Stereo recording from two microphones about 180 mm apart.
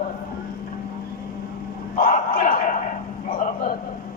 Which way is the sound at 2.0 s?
50° left (ahead or behind).